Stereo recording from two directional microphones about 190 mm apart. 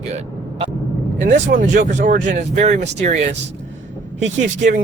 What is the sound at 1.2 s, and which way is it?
Speech, 45° right (ahead or behind).